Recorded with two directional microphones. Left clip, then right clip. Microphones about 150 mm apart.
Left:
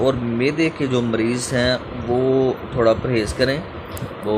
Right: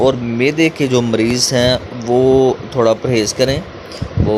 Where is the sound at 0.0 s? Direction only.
30° right (ahead or behind).